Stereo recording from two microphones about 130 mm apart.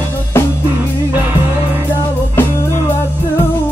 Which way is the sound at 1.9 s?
15° left (ahead or behind).